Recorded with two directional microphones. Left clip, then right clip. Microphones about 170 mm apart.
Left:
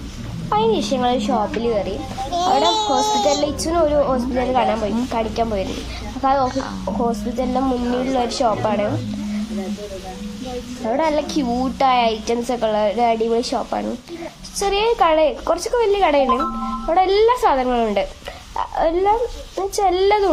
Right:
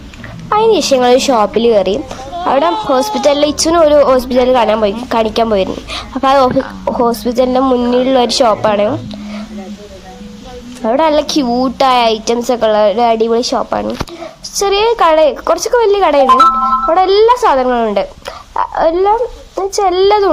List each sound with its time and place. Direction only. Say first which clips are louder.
0.5 s a woman's voice: right 9 dB; 50° right (ahead or behind)
10.8 s a woman's voice: right 9 dB; 40° right (ahead or behind)